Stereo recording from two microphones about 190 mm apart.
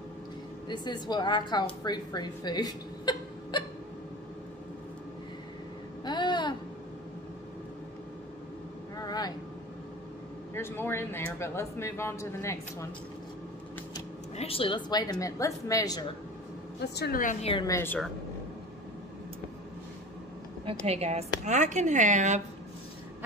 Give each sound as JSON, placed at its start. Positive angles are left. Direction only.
{"t": 0.7, "sound": "a woman's voice", "side_deg": 20}
{"t": 6.0, "sound": "a sound", "side_deg": 25}
{"t": 8.9, "sound": "vehicle", "side_deg": 20}
{"t": 10.5, "sound": "speech", "side_deg": 10}
{"t": 14.3, "sound": "a woman's voice", "side_deg": 30}
{"t": 16.8, "sound": "a woman's voice", "side_deg": 60}
{"t": 17.5, "sound": "a woman's voice", "side_deg": 25}
{"t": 17.7, "sound": "speech", "side_deg": 10}
{"t": 20.6, "sound": "speech", "side_deg": -30}